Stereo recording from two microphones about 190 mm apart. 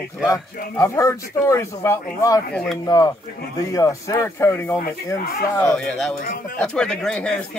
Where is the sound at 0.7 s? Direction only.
15° left (ahead or behind).